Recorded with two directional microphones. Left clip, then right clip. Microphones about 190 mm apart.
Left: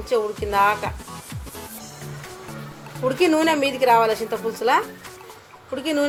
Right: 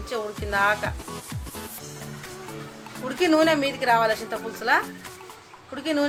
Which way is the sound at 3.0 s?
5° left (ahead or behind).